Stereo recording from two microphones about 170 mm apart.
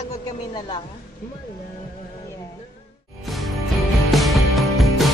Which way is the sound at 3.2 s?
Centre (ahead or behind).